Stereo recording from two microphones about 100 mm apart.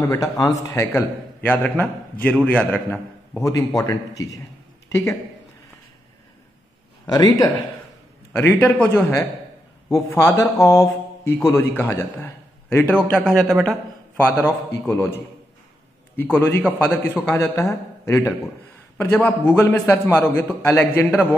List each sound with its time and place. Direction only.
0.0 s speech: 35° left (ahead or behind)
0.9 s a man's voice: 15° left (ahead or behind)
3.3 s speech: 35° left (ahead or behind)
7.1 s speech: 40° left (ahead or behind)
8.3 s a man's voice: 20° left (ahead or behind)
12.9 s speech: 5° left (ahead or behind)
14.2 s a man's voice: 20° left (ahead or behind)
16.2 s a man's voice: 20° left (ahead or behind)